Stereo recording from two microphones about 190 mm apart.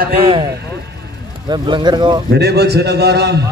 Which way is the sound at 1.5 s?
25° right (ahead or behind).